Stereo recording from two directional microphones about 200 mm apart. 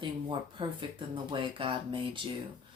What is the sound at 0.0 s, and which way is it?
Speech, 25° right (ahead or behind).